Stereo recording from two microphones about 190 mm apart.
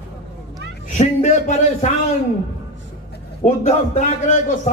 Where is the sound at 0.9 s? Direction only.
40° left (ahead or behind).